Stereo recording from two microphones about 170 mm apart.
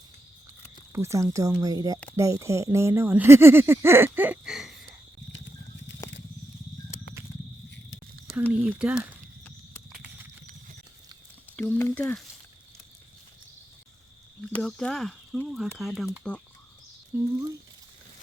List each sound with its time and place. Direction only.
0.9 s speech: 15° right (ahead or behind)
5.3 s patter: 90° left
8.6 s speech: 5° right (ahead or behind)
11.5 s speech: 10° left (ahead or behind)
14.5 s speech: 5° left (ahead or behind)
17.1 s speech: 10° right (ahead or behind)